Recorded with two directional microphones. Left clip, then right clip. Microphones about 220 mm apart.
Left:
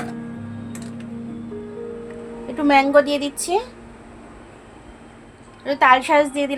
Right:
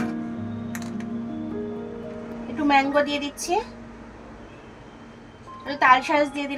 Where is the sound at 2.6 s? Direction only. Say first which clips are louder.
Left 5 dB; 55° left (ahead or behind).